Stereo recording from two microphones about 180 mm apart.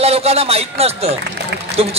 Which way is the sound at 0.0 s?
35° right (ahead or behind).